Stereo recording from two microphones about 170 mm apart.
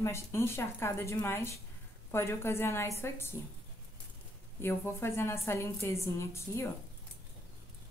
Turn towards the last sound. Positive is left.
turn(degrees=15)  # may be behind; listen again after turning